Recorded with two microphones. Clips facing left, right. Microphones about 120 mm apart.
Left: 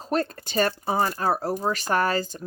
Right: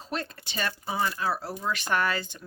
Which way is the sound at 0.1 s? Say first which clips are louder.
Left 9 dB; 45° left (ahead or behind).